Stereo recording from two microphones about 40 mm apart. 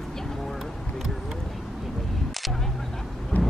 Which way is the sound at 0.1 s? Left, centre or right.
Centre.